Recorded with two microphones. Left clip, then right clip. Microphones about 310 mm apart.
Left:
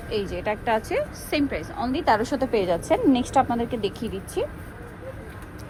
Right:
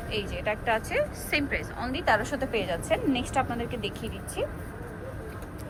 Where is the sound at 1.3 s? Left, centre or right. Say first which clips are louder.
Left 3 dB; centre.